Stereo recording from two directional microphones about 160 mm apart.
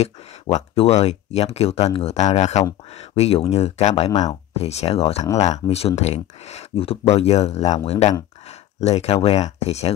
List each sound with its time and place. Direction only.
0.0 s speech: 45° left (ahead or behind)